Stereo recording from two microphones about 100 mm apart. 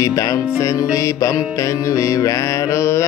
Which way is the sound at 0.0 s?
35° left (ahead or behind).